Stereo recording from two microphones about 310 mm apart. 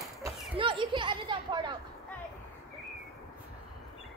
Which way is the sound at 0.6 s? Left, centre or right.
Centre.